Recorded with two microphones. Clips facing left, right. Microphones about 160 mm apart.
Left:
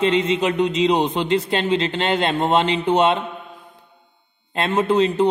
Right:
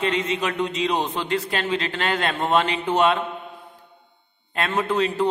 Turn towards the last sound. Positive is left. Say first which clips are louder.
# left 5 dB
turn(degrees=20)  # may be behind; listen again after turning